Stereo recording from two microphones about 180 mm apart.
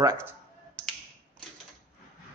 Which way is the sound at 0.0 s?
15° right (ahead or behind).